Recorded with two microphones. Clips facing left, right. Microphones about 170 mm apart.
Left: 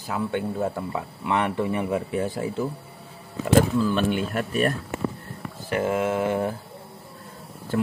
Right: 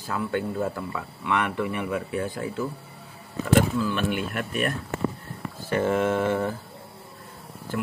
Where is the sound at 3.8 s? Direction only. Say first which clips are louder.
Left 3 dB; 35° left (ahead or behind).